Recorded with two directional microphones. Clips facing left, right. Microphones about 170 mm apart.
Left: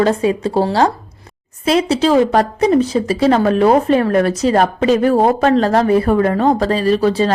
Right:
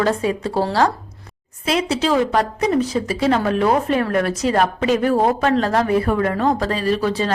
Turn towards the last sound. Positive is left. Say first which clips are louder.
# left 5 dB
turn(degrees=30)  # may be behind; listen again after turning